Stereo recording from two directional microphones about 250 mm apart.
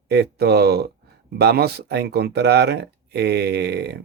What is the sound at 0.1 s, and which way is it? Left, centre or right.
Speech, right.